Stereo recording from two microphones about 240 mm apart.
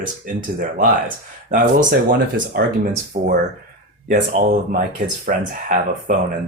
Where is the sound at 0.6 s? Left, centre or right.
Right.